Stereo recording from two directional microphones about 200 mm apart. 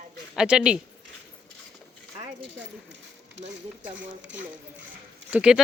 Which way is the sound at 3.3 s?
65° right (ahead or behind).